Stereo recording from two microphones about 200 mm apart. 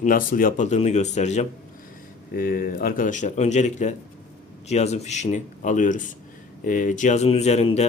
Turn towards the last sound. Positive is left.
turn(degrees=30)  # may be behind; listen again after turning